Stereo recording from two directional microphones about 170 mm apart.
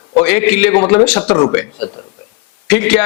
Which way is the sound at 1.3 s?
25° left (ahead or behind).